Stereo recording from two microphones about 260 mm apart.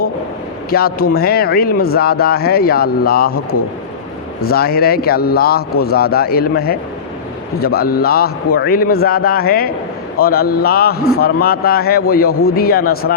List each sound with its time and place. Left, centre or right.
0.7 s speech: left